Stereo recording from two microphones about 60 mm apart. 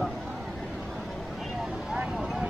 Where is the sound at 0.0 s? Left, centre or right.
Centre.